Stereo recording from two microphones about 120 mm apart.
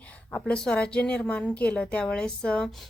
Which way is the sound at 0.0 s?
10° left (ahead or behind).